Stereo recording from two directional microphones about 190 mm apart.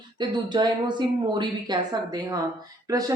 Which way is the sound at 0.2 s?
25° right (ahead or behind).